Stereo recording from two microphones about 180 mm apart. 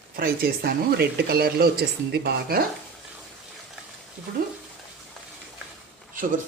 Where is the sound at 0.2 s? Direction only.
55° right (ahead or behind).